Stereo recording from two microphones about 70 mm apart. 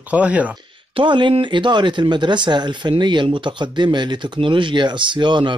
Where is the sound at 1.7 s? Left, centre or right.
Right.